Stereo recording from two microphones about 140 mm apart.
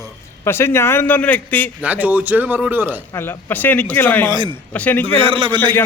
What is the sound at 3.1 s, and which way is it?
Speech, 15° left (ahead or behind).